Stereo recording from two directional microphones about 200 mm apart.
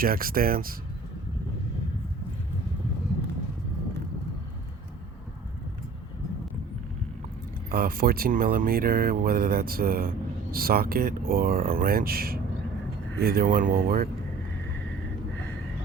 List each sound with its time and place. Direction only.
0.0 s speech: 45° right (ahead or behind)
7.7 s speech: 50° right (ahead or behind)